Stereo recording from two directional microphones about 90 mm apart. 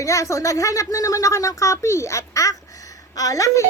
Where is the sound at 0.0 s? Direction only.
35° left (ahead or behind).